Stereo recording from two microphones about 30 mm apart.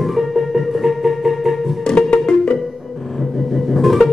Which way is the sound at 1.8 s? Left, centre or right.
Left.